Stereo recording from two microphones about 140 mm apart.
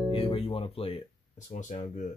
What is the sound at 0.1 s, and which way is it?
Music, 45° left (ahead or behind).